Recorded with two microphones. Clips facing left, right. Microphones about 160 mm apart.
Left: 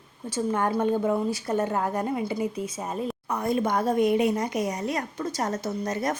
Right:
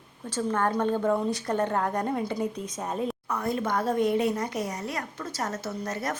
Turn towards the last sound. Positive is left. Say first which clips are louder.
# left 4 dB
turn(degrees=15)  # may be behind; listen again after turning